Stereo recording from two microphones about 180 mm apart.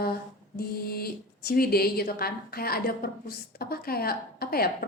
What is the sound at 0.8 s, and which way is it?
A woman's voice, 60° left (ahead or behind).